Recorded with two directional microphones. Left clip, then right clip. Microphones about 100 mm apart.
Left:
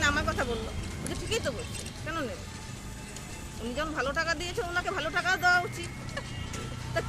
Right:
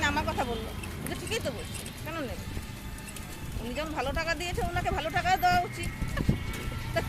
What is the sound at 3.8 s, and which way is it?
Speech, 30° left (ahead or behind).